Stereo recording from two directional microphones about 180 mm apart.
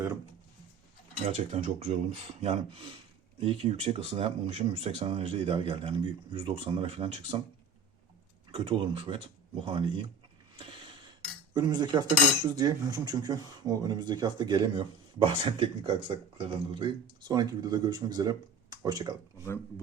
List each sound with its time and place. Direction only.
1.5 s speech: 35° right (ahead or behind)
8.5 s speech: 25° right (ahead or behind)
11.5 s speech: 25° right (ahead or behind)